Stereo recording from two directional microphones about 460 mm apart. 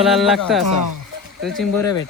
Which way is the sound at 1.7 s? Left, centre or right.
Left.